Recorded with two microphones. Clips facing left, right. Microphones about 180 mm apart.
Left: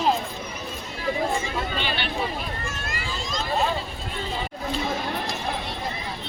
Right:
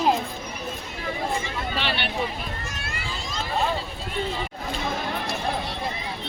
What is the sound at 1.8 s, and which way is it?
Speech, 70° right (ahead or behind).